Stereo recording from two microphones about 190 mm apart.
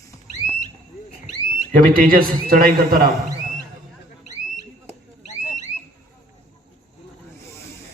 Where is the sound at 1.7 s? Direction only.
45° right (ahead or behind).